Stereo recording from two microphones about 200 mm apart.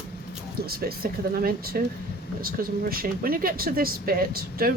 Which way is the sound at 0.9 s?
50° right (ahead or behind).